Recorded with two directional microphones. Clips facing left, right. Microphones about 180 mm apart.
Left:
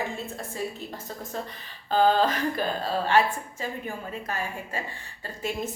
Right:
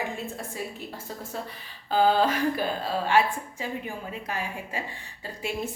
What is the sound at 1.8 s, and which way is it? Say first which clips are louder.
A woman's voice: even; 10° right (ahead or behind).